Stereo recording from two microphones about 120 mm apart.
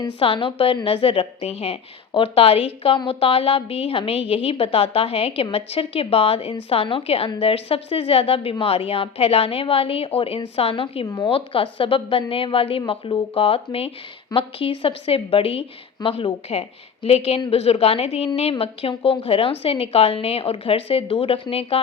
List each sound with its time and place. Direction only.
0.2 s a woman's voice: 50° left (ahead or behind)
11.0 s speech: 30° left (ahead or behind)
11.3 s a woman's voice: 50° left (ahead or behind)